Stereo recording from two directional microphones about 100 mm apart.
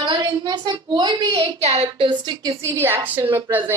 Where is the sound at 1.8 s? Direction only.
55° right (ahead or behind).